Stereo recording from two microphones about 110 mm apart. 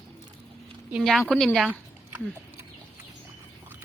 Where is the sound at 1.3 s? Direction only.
10° left (ahead or behind).